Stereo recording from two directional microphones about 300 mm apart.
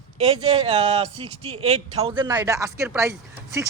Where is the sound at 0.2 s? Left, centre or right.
Centre.